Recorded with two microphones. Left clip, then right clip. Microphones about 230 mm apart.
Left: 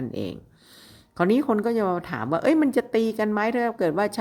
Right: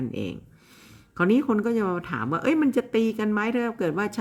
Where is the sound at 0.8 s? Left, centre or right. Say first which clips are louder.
Left 1 dB; right.